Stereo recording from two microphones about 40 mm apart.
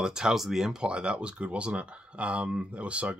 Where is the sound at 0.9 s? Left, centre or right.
Right.